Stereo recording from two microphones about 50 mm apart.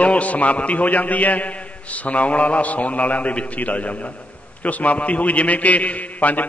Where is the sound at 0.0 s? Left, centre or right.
Left.